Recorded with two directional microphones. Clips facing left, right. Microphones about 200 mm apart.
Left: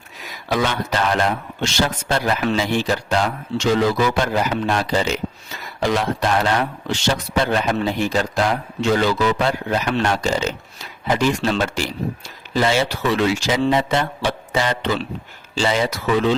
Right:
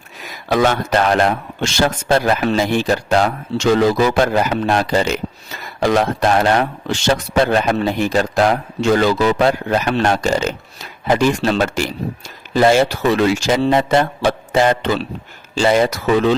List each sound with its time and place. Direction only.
0.4 s speech: 50° right (ahead or behind)